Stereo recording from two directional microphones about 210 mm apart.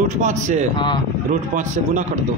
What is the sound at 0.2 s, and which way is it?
Speech, 35° right (ahead or behind).